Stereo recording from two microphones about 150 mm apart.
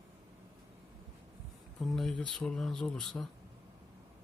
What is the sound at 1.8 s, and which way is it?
Speech, 5° left (ahead or behind).